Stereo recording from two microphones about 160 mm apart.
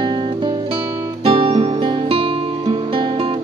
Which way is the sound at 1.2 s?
35° right (ahead or behind).